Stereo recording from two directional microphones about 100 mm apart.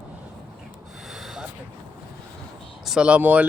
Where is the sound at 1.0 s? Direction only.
5° right (ahead or behind).